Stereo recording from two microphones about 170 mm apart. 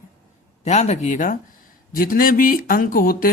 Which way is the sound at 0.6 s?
40° left (ahead or behind).